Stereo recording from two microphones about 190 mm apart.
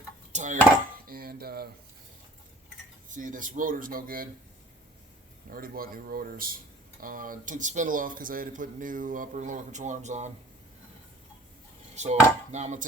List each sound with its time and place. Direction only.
0.3 s chopping: 40° right (ahead or behind)
1.0 s speech: 50° right (ahead or behind)
3.2 s speech: 45° right (ahead or behind)
5.5 s speech: 50° right (ahead or behind)
11.9 s chopping: 35° right (ahead or behind)